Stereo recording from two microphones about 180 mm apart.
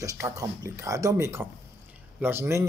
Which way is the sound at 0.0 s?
20° right (ahead or behind).